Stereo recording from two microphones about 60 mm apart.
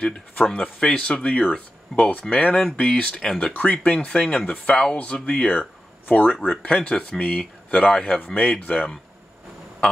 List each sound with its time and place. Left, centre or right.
0.5 s speech: centre
5.5 s a sound: left
6.3 s speech: centre